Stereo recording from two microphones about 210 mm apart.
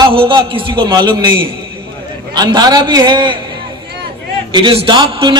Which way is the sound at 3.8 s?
50° right (ahead or behind).